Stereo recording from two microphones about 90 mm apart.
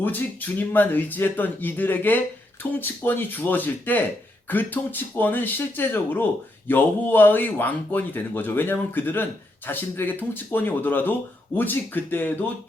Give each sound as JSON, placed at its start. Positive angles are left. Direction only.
{"t": 0.0, "sound": "speech", "side_deg": 20}